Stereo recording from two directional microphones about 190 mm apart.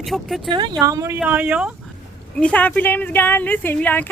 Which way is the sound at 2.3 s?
5° left (ahead or behind).